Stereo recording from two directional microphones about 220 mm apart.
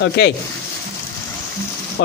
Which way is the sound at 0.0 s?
50° left (ahead or behind).